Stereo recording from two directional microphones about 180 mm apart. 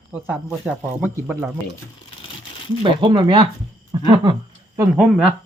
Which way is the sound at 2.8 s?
25° right (ahead or behind).